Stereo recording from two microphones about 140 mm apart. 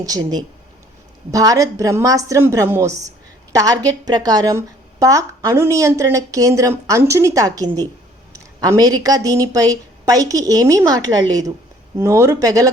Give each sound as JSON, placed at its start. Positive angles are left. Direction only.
{"t": 0.0, "sound": "a woman's voice", "side_deg": -25}